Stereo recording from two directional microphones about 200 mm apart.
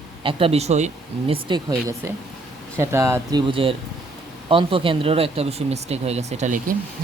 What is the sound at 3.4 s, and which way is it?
Speech, 25° right (ahead or behind).